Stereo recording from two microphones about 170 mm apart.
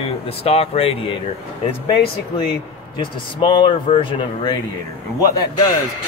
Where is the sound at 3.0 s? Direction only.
30° left (ahead or behind).